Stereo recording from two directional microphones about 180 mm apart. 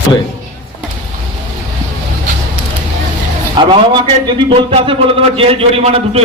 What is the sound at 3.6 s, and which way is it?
A man's voice, 25° right (ahead or behind).